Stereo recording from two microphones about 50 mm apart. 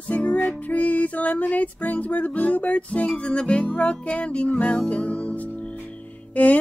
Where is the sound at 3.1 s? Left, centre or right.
Centre.